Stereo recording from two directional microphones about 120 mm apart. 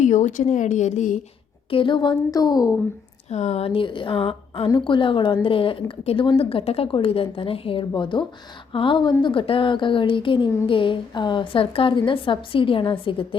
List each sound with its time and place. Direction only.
0.0 s speech: 90° left
1.7 s a woman's voice: 45° left (ahead or behind)
3.2 s a woman's voice: 70° left (ahead or behind); by 13.2 s 45° left (ahead or behind)